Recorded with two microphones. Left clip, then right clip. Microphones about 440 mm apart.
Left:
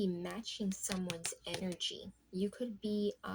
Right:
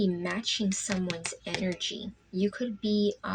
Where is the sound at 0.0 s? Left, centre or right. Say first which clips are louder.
Right 9 dB; left.